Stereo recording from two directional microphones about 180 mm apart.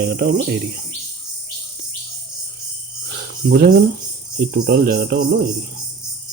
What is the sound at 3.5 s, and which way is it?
Speech, 55° right (ahead or behind).